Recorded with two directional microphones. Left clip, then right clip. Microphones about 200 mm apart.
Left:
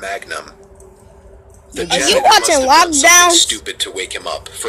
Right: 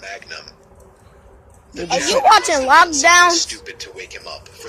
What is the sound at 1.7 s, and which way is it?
Speech, 30° left (ahead or behind).